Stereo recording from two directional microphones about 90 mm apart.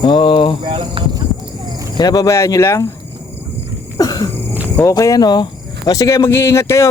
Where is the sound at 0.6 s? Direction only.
65° right (ahead or behind).